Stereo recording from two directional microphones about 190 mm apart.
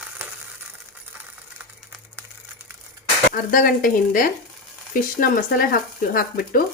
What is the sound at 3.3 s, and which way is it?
Speech, 50° left (ahead or behind).